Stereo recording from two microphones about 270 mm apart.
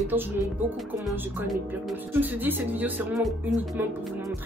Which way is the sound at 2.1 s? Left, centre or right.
Centre.